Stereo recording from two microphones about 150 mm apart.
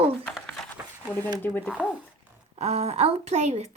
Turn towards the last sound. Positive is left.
turn(degrees=-45)  # may be behind; listen again after turning